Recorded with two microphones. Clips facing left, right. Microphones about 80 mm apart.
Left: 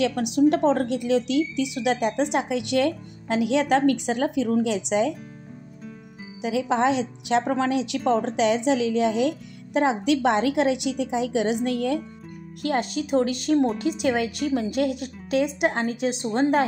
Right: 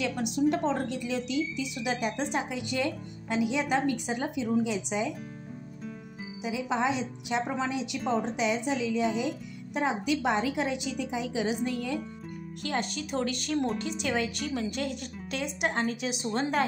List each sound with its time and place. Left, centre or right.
0.0 s a woman's voice: left
6.4 s a woman's voice: left
9.8 s a woman's voice: left
12.6 s a woman's voice: left